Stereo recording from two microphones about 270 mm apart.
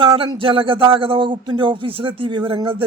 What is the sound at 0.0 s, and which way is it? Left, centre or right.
Speech, centre.